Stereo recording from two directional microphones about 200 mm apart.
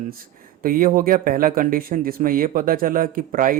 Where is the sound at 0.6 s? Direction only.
45° right (ahead or behind).